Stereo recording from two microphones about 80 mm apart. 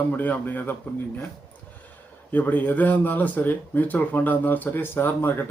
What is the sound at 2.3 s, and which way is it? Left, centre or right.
Speech, left.